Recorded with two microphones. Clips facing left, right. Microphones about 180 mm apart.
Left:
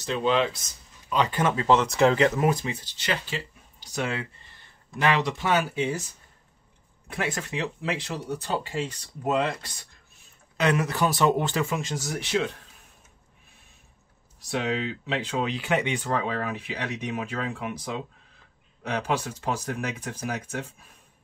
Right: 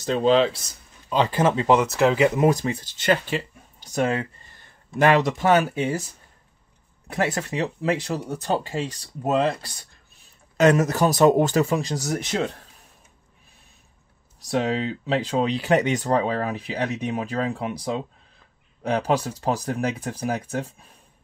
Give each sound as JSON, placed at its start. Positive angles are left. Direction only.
{"t": 0.0, "sound": "speech", "side_deg": -35}
{"t": 1.7, "sound": "speech", "side_deg": -5}
{"t": 2.5, "sound": "speech", "side_deg": -45}
{"t": 7.1, "sound": "speech", "side_deg": -40}
{"t": 14.5, "sound": "speech", "side_deg": -40}